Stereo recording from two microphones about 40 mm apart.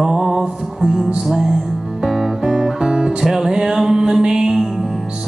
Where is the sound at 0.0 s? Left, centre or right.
Centre.